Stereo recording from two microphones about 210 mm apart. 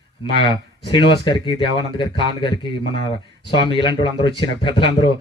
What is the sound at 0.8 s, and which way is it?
Speech, 25° left (ahead or behind).